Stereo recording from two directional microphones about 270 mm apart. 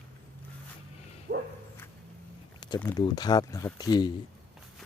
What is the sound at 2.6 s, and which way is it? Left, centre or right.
Speech, centre.